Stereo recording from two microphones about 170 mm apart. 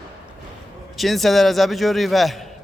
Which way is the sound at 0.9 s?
Centre (ahead or behind).